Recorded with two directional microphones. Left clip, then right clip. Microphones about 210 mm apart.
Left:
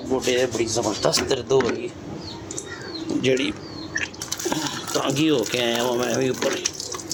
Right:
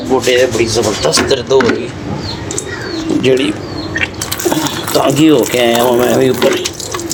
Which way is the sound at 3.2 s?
20° left (ahead or behind).